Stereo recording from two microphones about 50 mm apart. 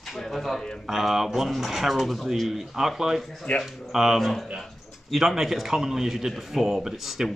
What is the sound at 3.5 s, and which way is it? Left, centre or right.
Speech, left.